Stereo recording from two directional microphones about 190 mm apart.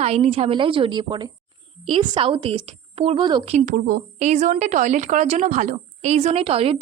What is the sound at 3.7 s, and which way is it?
Speech, 45° right (ahead or behind).